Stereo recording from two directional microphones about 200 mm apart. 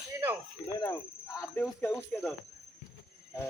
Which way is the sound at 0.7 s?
15° left (ahead or behind).